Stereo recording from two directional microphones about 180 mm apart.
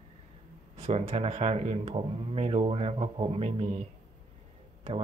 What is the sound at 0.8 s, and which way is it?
Speech, 35° right (ahead or behind).